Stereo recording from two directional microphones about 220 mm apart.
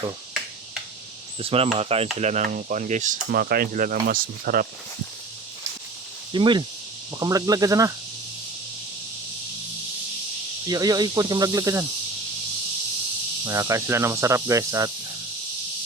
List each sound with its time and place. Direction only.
1.4 s speech: 25° right (ahead or behind)
6.3 s speech: 20° right (ahead or behind)
10.7 s speech: 15° right (ahead or behind)
13.4 s speech: 15° right (ahead or behind)